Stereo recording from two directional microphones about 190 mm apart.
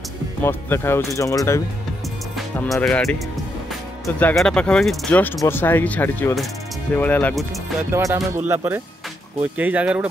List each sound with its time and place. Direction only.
0.4 s speech: 10° left (ahead or behind)
2.3 s speech: centre (ahead or behind)
7.9 s speech: 15° right (ahead or behind)